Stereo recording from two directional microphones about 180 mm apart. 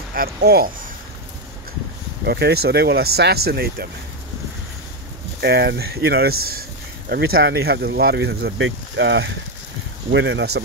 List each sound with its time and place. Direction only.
0.1 s speech: 60° right (ahead or behind)
2.2 s speech: 65° right (ahead or behind)
5.4 s speech: 65° right (ahead or behind)